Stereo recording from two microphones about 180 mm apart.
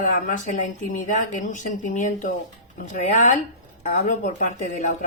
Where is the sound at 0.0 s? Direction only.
45° left (ahead or behind).